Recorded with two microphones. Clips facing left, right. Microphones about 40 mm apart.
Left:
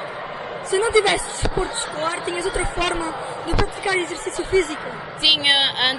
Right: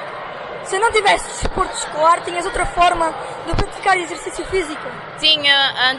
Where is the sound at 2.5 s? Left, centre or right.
Right.